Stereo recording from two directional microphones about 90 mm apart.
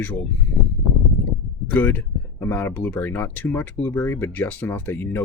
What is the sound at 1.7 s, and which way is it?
Speech, 20° left (ahead or behind).